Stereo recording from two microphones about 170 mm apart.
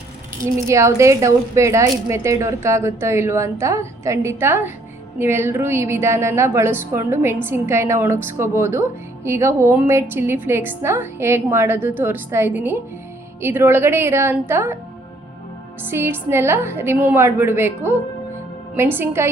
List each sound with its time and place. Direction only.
0.7 s a woman's voice: 15° right (ahead or behind)
15.9 s a woman's voice: 15° right (ahead or behind)